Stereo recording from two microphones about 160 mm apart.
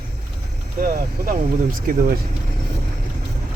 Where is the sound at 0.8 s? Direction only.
60° right (ahead or behind).